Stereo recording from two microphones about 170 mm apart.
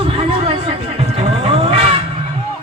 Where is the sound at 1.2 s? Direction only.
35° right (ahead or behind).